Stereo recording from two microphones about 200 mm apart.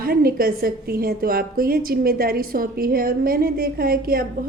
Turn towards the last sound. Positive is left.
turn(degrees=-45)  # may be behind; listen again after turning